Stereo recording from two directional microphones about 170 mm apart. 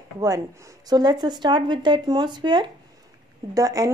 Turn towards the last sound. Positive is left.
turn(degrees=-20)  # may be behind; listen again after turning